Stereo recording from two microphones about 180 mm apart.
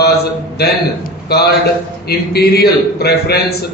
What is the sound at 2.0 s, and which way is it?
Speech, 60° left (ahead or behind).